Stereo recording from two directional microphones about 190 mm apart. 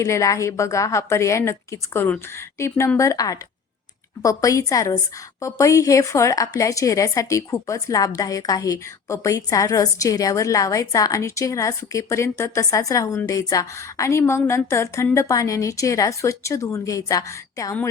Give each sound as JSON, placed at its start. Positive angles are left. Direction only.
{"t": 0.0, "sound": "a woman's voice", "side_deg": 15}